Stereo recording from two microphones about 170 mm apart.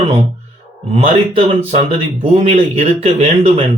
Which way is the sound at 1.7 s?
40° right (ahead or behind).